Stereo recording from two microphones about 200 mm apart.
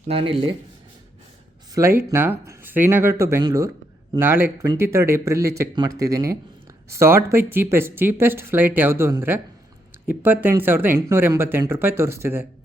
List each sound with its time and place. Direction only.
0.1 s speech: 30° right (ahead or behind)
1.7 s speech: 15° right (ahead or behind)